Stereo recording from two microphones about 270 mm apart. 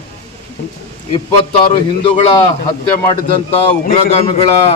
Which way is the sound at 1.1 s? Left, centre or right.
Centre.